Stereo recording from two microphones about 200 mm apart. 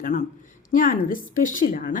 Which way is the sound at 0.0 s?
40° left (ahead or behind).